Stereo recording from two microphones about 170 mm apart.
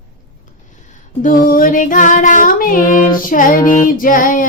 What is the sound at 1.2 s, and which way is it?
Music, 55° left (ahead or behind).